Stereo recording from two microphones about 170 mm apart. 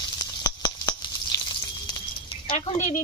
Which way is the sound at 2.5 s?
35° left (ahead or behind).